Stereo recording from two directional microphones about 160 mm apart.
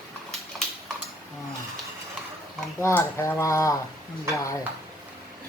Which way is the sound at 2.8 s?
15° left (ahead or behind).